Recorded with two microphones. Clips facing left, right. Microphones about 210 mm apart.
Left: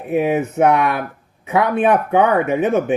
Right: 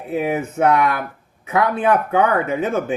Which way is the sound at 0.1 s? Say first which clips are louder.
Left 4 dB; 20° left (ahead or behind).